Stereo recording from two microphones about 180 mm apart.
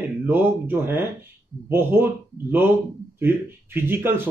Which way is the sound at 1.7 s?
15° right (ahead or behind).